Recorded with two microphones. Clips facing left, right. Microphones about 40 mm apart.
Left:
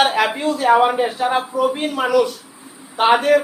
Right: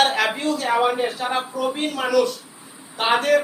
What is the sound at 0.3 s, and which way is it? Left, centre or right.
Speech, centre.